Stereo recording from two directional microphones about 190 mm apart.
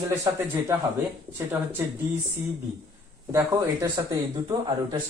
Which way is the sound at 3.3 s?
15° right (ahead or behind).